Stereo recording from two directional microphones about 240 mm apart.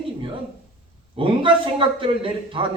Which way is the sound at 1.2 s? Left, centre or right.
Right.